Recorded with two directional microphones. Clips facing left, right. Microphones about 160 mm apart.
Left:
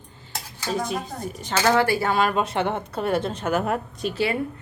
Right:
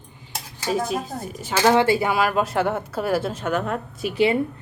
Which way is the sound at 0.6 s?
Centre (ahead or behind).